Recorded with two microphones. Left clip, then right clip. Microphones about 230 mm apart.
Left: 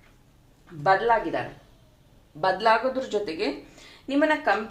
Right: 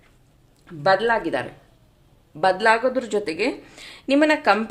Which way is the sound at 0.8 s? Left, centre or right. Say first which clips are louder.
Right 2 dB; right.